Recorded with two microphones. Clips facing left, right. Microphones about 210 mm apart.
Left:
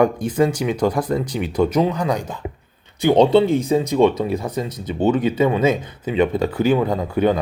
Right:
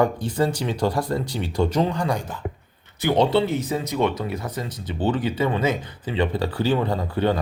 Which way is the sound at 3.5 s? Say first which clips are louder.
Left 7 dB; 15° left (ahead or behind).